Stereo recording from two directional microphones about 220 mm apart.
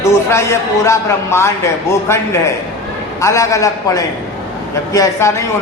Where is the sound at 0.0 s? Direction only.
10° left (ahead or behind).